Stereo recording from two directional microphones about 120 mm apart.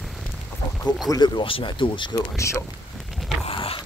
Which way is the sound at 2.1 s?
25° left (ahead or behind).